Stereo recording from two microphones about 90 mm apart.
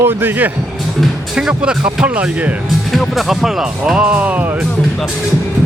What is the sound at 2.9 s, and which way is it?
Speech, 5° right (ahead or behind).